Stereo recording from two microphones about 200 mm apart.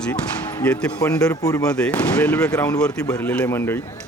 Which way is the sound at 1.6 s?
5° left (ahead or behind).